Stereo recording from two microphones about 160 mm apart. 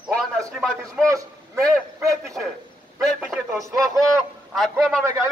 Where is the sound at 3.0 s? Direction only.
5° left (ahead or behind).